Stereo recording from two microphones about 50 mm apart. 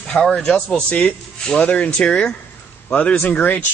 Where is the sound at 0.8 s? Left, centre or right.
Left.